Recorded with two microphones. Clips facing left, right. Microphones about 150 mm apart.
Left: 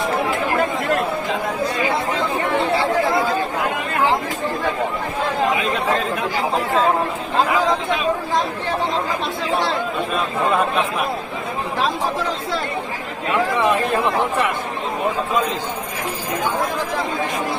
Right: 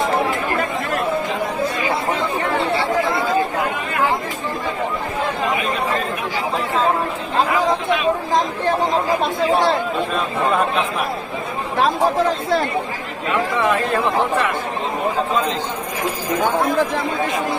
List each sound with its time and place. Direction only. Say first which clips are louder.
9.5 s chatter: right 4 dB; 40° right (ahead or behind)
11.8 s chatter: right 6 dB; 50° right (ahead or behind)
13.7 s speech: even; 15° left (ahead or behind)